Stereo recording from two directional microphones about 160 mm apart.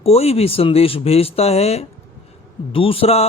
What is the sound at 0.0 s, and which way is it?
Speech, 40° left (ahead or behind).